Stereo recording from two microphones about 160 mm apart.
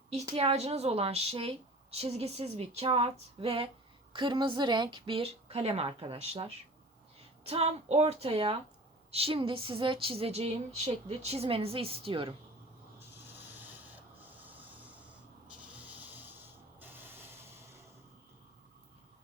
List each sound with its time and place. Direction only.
0.3 s speech: 40° right (ahead or behind)
13.6 s rub: 10° right (ahead or behind)
14.4 s a sound: 10° right (ahead or behind)
15.4 s sanding: 10° right (ahead or behind)